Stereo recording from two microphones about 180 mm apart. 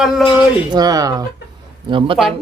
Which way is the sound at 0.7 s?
20° right (ahead or behind).